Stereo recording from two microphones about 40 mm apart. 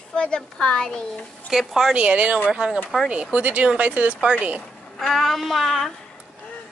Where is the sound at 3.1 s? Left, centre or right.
Right.